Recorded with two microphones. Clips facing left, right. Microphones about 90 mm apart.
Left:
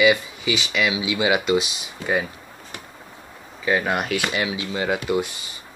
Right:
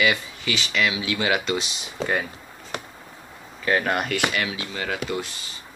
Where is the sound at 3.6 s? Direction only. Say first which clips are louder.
Left 1 dB; 5° left (ahead or behind).